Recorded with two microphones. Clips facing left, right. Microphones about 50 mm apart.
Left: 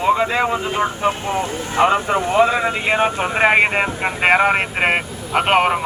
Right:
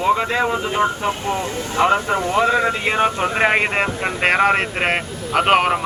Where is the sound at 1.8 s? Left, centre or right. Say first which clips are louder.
Left 1 dB; left.